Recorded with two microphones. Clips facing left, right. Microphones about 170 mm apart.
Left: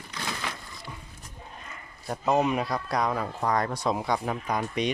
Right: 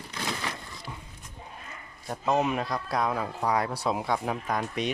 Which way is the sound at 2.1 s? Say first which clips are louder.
Left 2 dB; centre (ahead or behind).